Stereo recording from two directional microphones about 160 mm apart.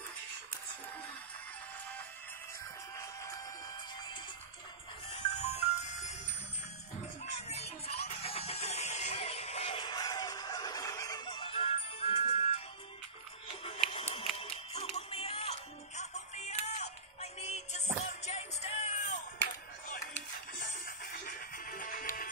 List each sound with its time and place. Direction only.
5.1 s music: 40° left (ahead or behind)
7.9 s music: 40° left (ahead or behind)
13.8 s music: 35° left (ahead or behind)
20.5 s music: 60° left (ahead or behind)